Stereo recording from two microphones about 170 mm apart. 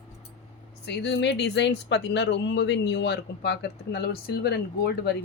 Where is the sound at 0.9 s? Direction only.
90° left; by 5.1 s 70° left (ahead or behind).